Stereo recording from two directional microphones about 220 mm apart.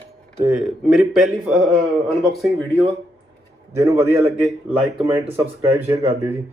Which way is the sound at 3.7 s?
10° right (ahead or behind).